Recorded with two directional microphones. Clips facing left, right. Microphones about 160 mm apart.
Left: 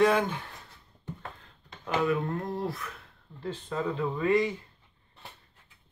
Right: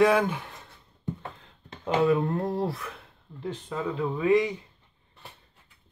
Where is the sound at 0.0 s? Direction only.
10° right (ahead or behind).